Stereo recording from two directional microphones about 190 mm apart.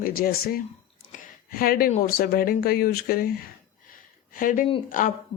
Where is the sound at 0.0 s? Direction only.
50° left (ahead or behind).